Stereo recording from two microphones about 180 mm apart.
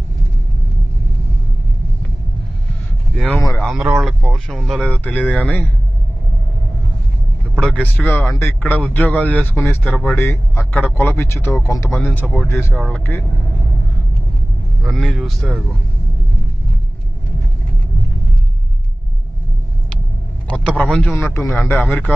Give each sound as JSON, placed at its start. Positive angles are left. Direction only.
{"t": 3.2, "sound": "speech", "side_deg": 5}
{"t": 3.6, "sound": "speech", "side_deg": -5}
{"t": 7.5, "sound": "a man's voice", "side_deg": 5}
{"t": 10.1, "sound": "a man's voice", "side_deg": 15}
{"t": 12.7, "sound": "a man's voice", "side_deg": 5}
{"t": 14.8, "sound": "speech", "side_deg": 0}
{"t": 20.5, "sound": "a man's voice", "side_deg": 5}